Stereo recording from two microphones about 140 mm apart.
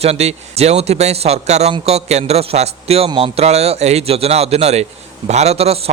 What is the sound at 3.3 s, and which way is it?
A man's voice, 50° right (ahead or behind).